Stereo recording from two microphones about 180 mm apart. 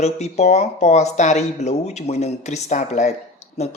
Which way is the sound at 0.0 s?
40° left (ahead or behind).